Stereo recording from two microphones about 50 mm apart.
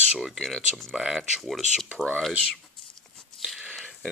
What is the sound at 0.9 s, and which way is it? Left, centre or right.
Speech, centre.